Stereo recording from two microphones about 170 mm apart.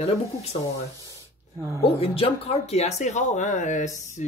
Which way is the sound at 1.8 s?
35° left (ahead or behind).